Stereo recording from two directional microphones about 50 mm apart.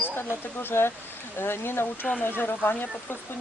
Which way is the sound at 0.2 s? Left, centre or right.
Left.